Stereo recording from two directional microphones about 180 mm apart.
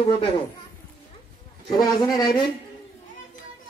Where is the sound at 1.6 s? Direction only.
25° left (ahead or behind).